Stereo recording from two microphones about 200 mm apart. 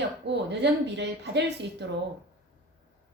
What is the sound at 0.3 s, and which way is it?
Speech, 60° right (ahead or behind).